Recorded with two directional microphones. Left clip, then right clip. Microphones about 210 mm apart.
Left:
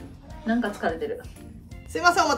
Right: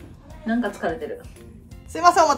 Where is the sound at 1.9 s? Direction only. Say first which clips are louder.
Right 4 dB; 20° right (ahead or behind).